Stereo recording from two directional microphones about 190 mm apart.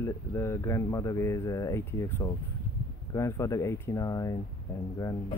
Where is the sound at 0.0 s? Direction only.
15° left (ahead or behind).